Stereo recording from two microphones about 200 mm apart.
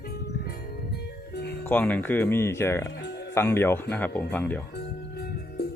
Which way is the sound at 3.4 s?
10° left (ahead or behind).